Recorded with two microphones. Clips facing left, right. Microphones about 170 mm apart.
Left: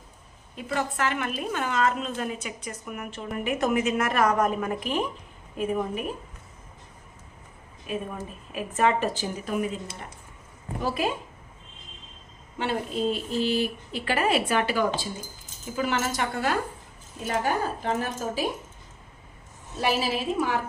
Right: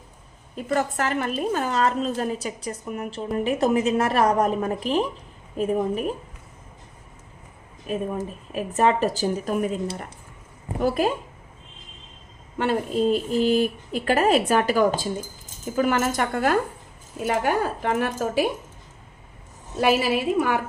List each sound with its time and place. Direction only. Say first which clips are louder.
0.6 s a woman's voice: right 4 dB; 40° right (ahead or behind)
7.9 s a woman's voice: right 5 dB; 40° right (ahead or behind)
12.5 s speech: right 5 dB; 45° right (ahead or behind)
17.4 s speech: right 1 dB; 70° right (ahead or behind)
19.8 s a woman's voice: right 5 dB; 60° right (ahead or behind)